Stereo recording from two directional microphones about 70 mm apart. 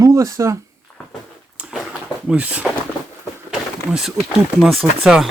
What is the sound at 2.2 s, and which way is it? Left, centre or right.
Speech, centre.